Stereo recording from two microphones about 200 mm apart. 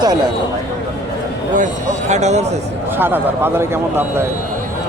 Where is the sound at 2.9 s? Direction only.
10° right (ahead or behind).